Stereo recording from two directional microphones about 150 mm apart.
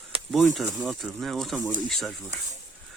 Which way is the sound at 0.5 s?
Centre (ahead or behind).